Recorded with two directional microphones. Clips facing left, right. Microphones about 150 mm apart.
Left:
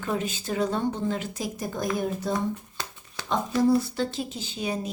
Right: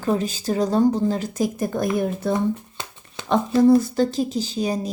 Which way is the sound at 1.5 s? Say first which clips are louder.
Right 6 dB; 55° right (ahead or behind).